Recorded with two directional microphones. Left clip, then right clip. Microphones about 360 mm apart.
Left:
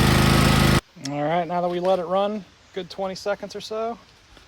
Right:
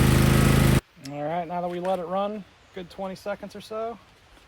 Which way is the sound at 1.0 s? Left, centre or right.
Left.